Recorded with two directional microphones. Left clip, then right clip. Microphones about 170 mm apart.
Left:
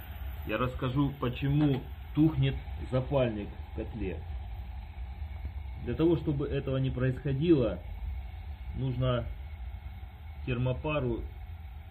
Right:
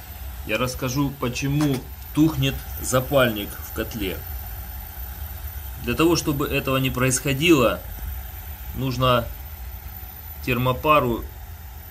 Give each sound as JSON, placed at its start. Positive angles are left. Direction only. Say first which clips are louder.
{"t": 0.5, "sound": "speech", "louder": "right 8 dB", "side_deg": -30}
{"t": 5.9, "sound": "speech", "louder": "right 8 dB", "side_deg": -25}
{"t": 8.8, "sound": "speech", "louder": "right 13 dB", "side_deg": -30}
{"t": 10.4, "sound": "speech", "louder": "right 12 dB", "side_deg": -30}